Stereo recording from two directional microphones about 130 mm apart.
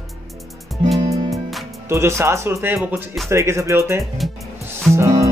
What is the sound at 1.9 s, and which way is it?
Speech, 20° right (ahead or behind).